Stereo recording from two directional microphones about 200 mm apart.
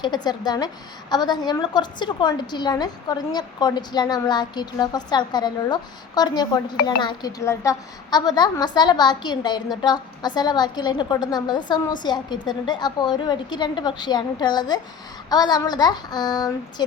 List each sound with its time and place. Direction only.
0.0 s a woman's voice: 20° left (ahead or behind)